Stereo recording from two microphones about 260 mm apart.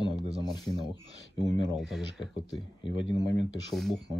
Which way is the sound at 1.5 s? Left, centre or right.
Centre.